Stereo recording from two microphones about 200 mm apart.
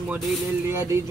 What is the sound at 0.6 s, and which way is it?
Speech, 15° right (ahead or behind).